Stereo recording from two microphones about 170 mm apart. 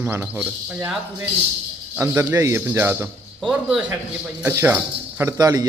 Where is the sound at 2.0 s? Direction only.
15° right (ahead or behind).